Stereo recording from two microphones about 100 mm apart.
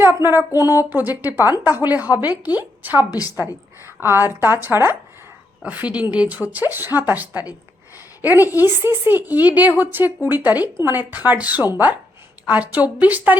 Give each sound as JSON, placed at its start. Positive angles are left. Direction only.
{"t": 0.0, "sound": "a woman's voice", "side_deg": -25}